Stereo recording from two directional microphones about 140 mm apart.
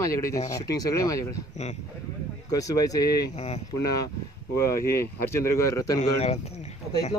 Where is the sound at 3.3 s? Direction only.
50° left (ahead or behind).